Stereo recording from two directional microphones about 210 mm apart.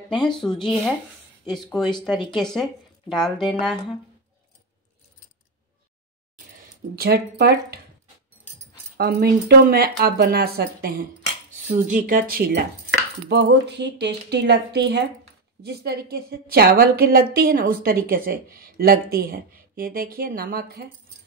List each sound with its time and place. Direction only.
0.2 s a woman's voice: 5° left (ahead or behind)
7.0 s a woman's voice: 50° right (ahead or behind)
8.9 s a woman's voice: 50° right (ahead or behind)
11.5 s a woman's voice: 35° right (ahead or behind)